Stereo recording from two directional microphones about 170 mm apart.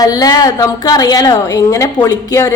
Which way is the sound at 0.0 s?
20° left (ahead or behind).